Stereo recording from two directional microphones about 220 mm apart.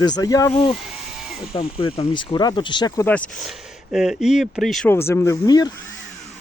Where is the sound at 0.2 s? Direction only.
15° left (ahead or behind).